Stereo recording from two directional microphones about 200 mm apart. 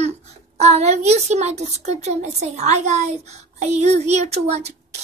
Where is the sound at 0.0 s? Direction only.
35° right (ahead or behind).